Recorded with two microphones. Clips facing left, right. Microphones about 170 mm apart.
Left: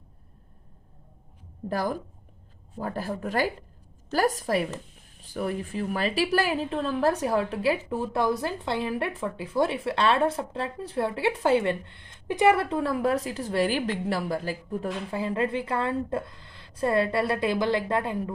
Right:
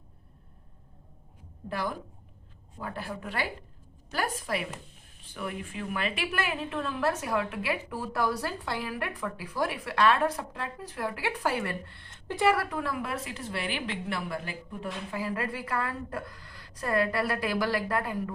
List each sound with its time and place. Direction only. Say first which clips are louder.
1.7 s a woman's voice: left 5 dB; 40° left (ahead or behind)
15.2 s a woman's voice: left 6 dB; 25° left (ahead or behind)